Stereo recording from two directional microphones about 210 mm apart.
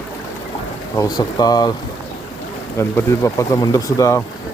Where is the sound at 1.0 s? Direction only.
20° left (ahead or behind).